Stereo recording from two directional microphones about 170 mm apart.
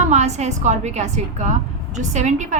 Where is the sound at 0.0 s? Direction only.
45° right (ahead or behind).